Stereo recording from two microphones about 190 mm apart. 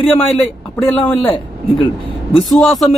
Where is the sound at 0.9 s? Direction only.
25° left (ahead or behind).